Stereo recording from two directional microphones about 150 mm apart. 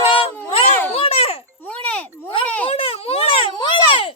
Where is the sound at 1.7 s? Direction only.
10° left (ahead or behind).